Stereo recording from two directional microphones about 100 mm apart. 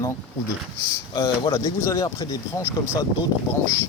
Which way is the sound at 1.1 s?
50° left (ahead or behind).